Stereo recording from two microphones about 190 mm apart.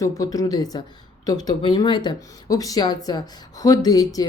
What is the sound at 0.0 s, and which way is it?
Speech, 15° left (ahead or behind).